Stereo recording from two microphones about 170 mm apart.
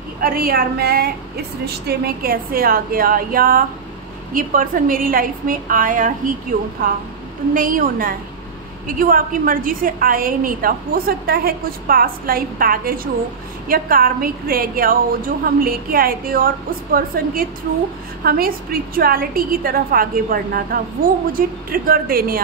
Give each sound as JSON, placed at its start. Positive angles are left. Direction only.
{"t": 0.2, "sound": "a woman's voice", "side_deg": -60}